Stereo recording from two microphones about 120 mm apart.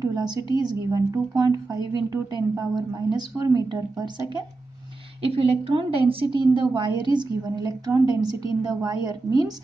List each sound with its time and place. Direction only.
0.0 s a woman's voice: 30° right (ahead or behind)
5.2 s a woman's voice: 55° right (ahead or behind); by 9.5 s 30° right (ahead or behind)